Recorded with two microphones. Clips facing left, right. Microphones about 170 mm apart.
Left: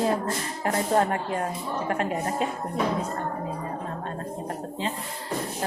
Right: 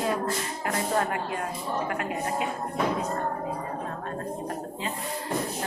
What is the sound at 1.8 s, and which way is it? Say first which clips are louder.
Speech: left 3 dB; 35° left (ahead or behind).